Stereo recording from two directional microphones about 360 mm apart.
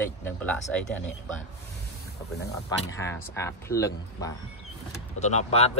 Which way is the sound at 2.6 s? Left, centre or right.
Centre.